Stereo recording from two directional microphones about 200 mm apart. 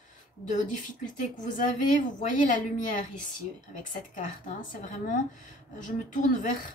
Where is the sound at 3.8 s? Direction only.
40° left (ahead or behind).